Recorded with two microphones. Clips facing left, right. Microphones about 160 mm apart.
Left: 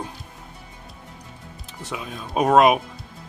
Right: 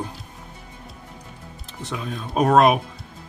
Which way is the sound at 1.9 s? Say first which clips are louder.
Right 1 dB; 5° left (ahead or behind).